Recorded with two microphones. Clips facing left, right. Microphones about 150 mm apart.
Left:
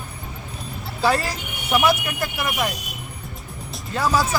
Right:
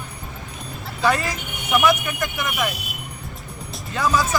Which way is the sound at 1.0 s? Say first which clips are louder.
Even; 35° left (ahead or behind).